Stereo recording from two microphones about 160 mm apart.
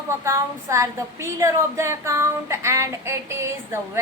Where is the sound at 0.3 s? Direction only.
20° right (ahead or behind).